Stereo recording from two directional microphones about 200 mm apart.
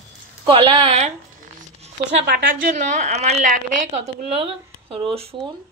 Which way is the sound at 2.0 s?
50° right (ahead or behind).